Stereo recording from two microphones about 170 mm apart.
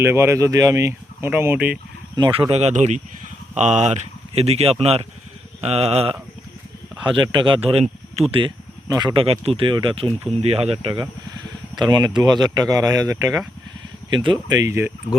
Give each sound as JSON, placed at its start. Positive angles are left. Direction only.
{"t": 0.0, "sound": "speech", "side_deg": -15}
{"t": 2.1, "sound": "speech", "side_deg": -25}
{"t": 14.5, "sound": "speech", "side_deg": -20}